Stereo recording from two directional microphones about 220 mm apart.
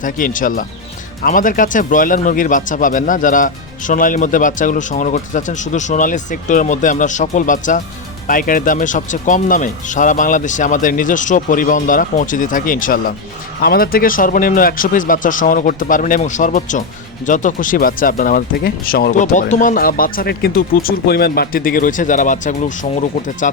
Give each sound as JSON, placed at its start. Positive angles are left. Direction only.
{"t": 0.0, "sound": "speech", "side_deg": 35}